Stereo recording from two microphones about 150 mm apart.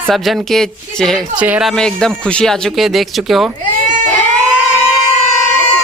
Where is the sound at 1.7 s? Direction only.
5° left (ahead or behind).